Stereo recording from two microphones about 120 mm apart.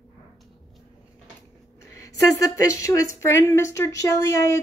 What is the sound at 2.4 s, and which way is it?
Speech, 30° left (ahead or behind).